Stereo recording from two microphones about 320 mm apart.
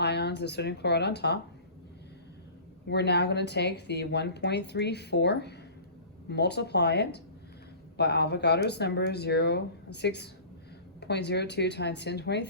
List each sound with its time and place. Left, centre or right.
0.0 s speech: left
2.8 s speech: left